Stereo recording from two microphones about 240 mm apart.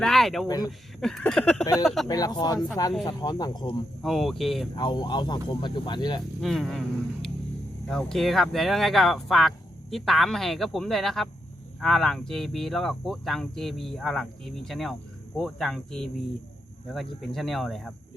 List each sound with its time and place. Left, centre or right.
0.0 s speech: centre
0.4 s speech: centre
1.0 s speech: centre
2.0 s speech: centre
4.0 s speech: centre
4.7 s speech: centre
6.4 s speech: centre